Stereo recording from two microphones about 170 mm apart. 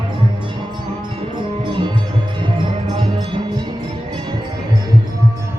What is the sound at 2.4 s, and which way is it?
Music, 25° right (ahead or behind).